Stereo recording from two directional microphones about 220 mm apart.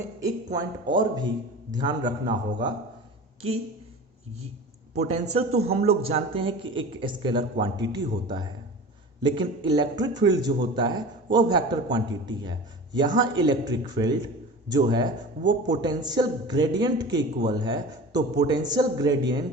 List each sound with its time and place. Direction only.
0.2 s a man's voice: 15° right (ahead or behind)
4.9 s a man's voice: 30° right (ahead or behind)
9.2 s a man's voice: 20° right (ahead or behind)